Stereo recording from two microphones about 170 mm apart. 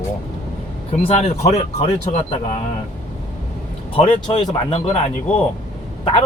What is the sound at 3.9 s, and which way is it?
Speech, 30° left (ahead or behind).